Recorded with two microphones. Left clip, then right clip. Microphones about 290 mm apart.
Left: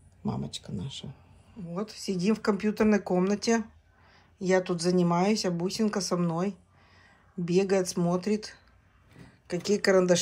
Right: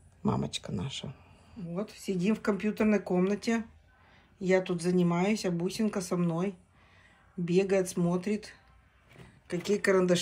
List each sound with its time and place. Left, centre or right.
0.3 s speech: centre
1.7 s speech: centre